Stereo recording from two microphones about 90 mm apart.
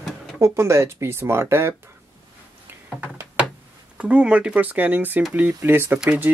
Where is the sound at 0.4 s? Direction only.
30° right (ahead or behind).